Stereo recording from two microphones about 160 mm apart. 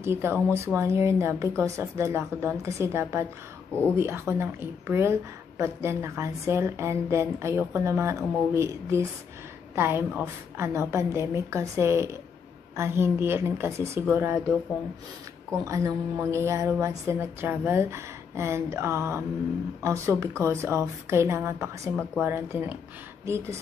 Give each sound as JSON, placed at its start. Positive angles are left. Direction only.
{"t": 0.0, "sound": "a woman's voice", "side_deg": -15}
{"t": 15.5, "sound": "a woman's voice", "side_deg": -20}